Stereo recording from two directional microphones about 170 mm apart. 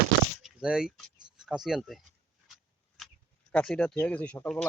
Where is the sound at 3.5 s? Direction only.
5° left (ahead or behind).